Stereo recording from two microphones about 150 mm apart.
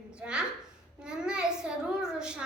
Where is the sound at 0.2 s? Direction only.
5° right (ahead or behind).